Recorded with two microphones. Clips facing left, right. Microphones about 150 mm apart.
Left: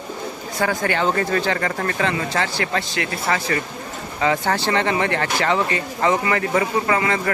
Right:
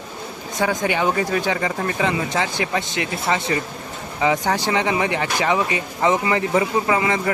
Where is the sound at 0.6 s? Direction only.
20° right (ahead or behind).